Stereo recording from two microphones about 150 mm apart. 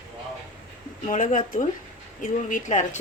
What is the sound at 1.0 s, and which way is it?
Speech, 60° left (ahead or behind).